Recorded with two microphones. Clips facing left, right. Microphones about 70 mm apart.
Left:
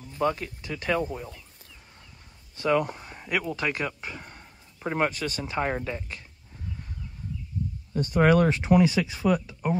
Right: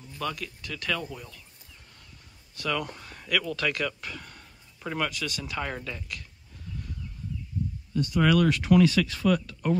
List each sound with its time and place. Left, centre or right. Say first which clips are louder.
0.1 s speech: left 7 dB; left
2.5 s speech: left 6 dB; left
7.9 s speech: left 3 dB; left; by 9.8 s centre